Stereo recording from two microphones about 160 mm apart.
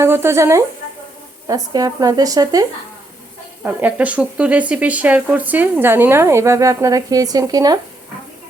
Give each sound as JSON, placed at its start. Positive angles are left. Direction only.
{"t": 0.0, "sound": "speech", "side_deg": -15}
{"t": 3.6, "sound": "speech", "side_deg": -10}